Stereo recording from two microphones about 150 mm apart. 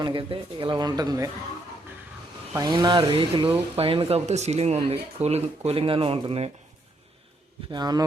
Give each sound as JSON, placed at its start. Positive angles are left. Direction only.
{"t": 0.0, "sound": "speech", "side_deg": -35}
{"t": 2.6, "sound": "speech", "side_deg": -30}
{"t": 7.7, "sound": "speech", "side_deg": -25}